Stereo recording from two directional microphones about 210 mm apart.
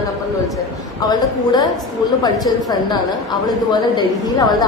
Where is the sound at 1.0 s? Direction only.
20° left (ahead or behind).